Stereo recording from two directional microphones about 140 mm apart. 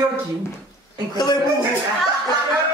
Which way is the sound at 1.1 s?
30° left (ahead or behind).